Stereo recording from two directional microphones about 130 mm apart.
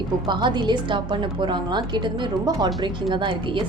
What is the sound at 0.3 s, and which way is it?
Speech, 35° right (ahead or behind).